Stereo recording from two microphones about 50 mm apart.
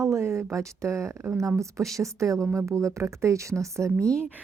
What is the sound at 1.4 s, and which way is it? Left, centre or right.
Speech, right.